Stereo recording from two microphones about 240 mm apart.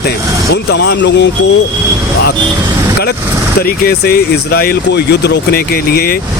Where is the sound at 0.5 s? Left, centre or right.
Left.